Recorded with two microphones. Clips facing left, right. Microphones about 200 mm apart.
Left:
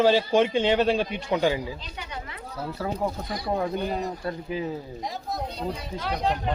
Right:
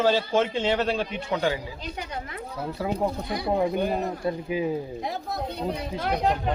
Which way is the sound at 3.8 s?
50° right (ahead or behind).